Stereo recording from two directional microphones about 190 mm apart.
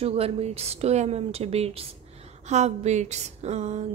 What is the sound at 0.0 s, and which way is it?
A woman's voice, 30° right (ahead or behind).